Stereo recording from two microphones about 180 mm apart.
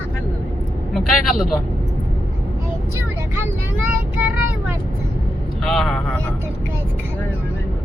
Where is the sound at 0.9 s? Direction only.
Centre (ahead or behind).